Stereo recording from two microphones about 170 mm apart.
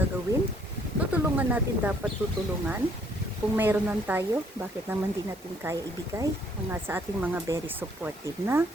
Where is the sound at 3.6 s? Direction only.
10° right (ahead or behind).